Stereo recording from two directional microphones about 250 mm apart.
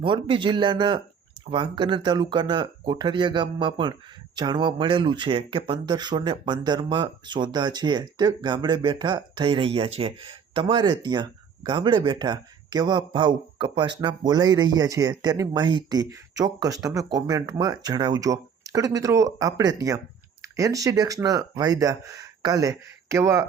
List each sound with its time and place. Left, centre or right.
0.0 s speech: centre